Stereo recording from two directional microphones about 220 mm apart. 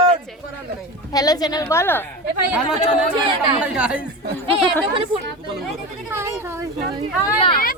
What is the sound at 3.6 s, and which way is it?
Speech, 5° right (ahead or behind).